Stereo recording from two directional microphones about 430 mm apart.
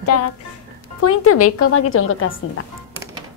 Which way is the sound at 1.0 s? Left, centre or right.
Left.